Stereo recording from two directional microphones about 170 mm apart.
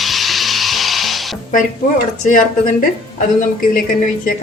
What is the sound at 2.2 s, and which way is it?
Speech, 50° left (ahead or behind).